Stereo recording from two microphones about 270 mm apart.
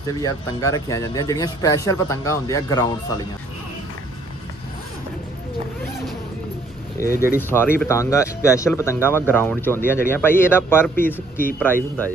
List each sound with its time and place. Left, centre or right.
0.2 s speech: centre
7.1 s speech: left
7.4 s speech: centre